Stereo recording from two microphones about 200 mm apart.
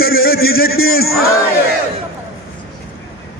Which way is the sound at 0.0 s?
50° left (ahead or behind).